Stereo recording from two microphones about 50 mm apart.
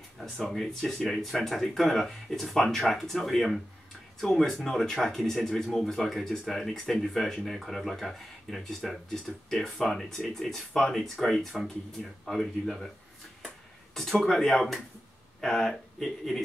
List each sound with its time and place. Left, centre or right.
0.5 s speech: centre
14.2 s speech: centre